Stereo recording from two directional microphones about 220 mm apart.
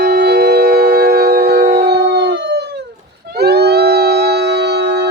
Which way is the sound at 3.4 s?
50° right (ahead or behind).